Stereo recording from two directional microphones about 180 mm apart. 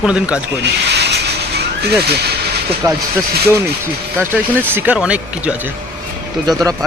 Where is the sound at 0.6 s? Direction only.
70° right (ahead or behind).